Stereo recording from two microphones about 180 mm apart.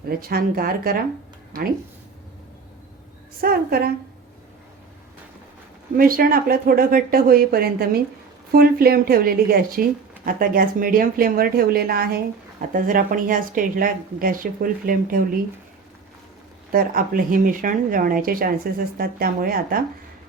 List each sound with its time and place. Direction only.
0.2 s speech: 55° right (ahead or behind)
3.4 s speech: 55° right (ahead or behind)
6.0 s speech: 55° right (ahead or behind)
16.7 s speech: 50° right (ahead or behind)